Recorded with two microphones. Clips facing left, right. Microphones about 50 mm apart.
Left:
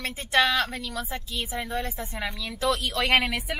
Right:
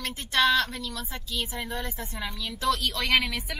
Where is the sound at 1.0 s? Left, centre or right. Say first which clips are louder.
Left 2 dB; centre.